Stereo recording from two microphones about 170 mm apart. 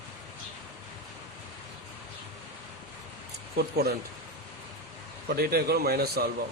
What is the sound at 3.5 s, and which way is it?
Speech, 65° right (ahead or behind).